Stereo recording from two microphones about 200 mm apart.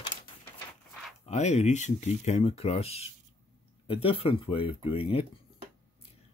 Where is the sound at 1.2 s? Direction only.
35° left (ahead or behind).